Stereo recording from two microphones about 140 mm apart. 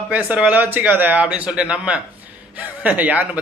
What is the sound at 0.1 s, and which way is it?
A man's voice, 10° right (ahead or behind).